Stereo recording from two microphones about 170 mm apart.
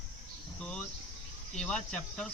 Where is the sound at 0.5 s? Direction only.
5° left (ahead or behind).